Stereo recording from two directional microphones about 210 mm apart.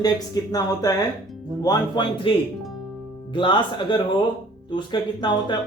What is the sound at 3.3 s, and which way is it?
Speech, 25° left (ahead or behind).